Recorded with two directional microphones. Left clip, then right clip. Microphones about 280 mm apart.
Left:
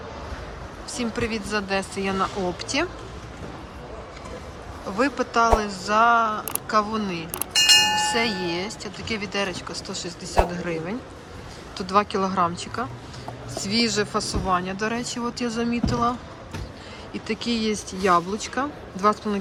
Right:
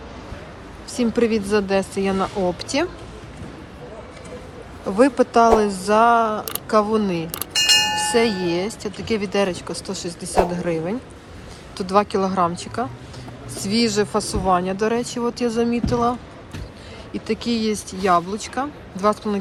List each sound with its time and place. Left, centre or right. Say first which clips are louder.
0.9 s speech: right 8 dB; centre
4.9 s speech: right 7 dB; centre